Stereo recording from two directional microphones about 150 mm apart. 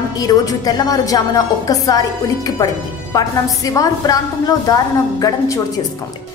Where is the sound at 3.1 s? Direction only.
25° left (ahead or behind).